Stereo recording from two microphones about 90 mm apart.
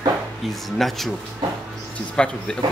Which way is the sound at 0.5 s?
Centre (ahead or behind).